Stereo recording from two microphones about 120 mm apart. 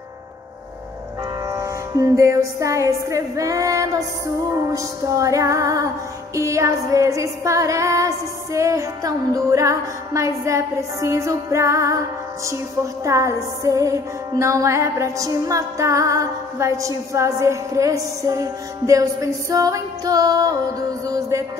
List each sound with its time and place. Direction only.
1.5 s music: 30° right (ahead or behind)
13.0 s music: 25° right (ahead or behind)